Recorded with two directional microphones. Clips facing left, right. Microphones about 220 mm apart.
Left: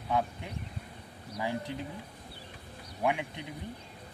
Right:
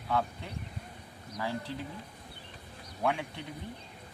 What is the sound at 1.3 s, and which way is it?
Speech, 15° left (ahead or behind).